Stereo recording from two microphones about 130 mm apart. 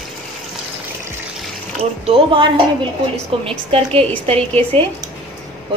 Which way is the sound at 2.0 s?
45° right (ahead or behind).